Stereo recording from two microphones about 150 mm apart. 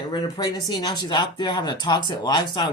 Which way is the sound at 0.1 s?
30° left (ahead or behind).